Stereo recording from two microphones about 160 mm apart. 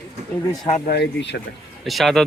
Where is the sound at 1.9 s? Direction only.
Centre (ahead or behind).